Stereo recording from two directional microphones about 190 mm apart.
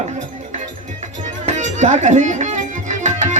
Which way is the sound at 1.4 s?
40° right (ahead or behind).